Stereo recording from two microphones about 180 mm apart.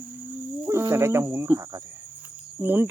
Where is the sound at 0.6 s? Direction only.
15° right (ahead or behind).